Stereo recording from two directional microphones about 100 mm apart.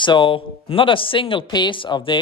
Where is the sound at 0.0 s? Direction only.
55° left (ahead or behind).